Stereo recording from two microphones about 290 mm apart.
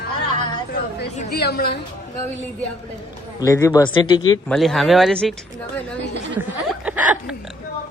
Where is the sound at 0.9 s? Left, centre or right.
Left.